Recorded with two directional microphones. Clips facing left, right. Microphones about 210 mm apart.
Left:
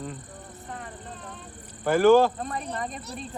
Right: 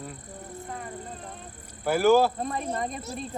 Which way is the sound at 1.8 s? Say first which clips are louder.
Left 3 dB; 10° right (ahead or behind).